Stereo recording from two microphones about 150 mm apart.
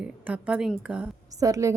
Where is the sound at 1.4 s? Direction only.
20° right (ahead or behind).